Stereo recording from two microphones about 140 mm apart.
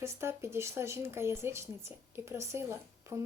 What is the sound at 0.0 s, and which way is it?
Speech, 20° right (ahead or behind).